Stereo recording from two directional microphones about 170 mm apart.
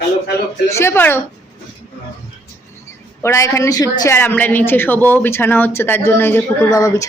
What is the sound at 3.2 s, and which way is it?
A man's voice, 15° left (ahead or behind).